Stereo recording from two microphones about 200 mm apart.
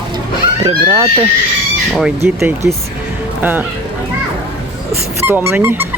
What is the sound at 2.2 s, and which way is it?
Speech, 15° right (ahead or behind).